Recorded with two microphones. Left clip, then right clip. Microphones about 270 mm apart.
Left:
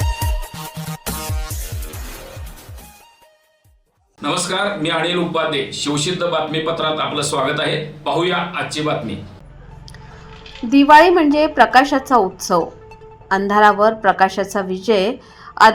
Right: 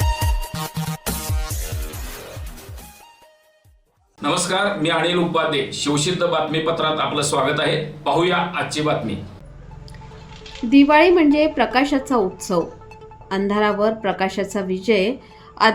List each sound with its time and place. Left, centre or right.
0.0 s music: centre
4.2 s a man's voice: centre
10.7 s a woman's voice: centre
13.2 s a woman's voice: centre